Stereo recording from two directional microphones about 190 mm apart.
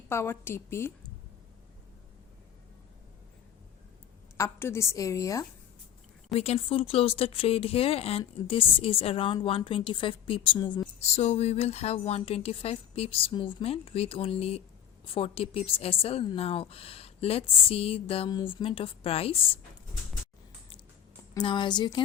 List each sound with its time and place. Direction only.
0.1 s a woman's voice: 10° left (ahead or behind)
4.4 s a woman's voice: 15° left (ahead or behind)
6.2 s a woman's voice: 35° left (ahead or behind)
11.0 s a woman's voice: 35° left (ahead or behind)
21.3 s a woman's voice: 25° left (ahead or behind)